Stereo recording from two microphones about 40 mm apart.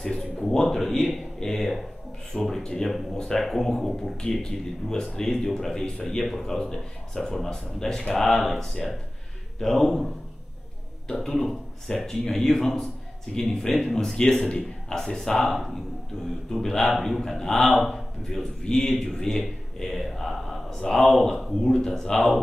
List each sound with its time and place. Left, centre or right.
0.0 s a sound: centre
0.5 s speech: centre
2.6 s speech: centre
3.4 s speech: centre
11.1 s speech: centre
16.9 s speech: centre
17.2 s speech: centre